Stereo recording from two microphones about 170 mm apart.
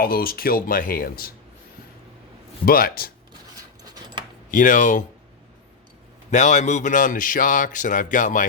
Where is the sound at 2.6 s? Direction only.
60° left (ahead or behind).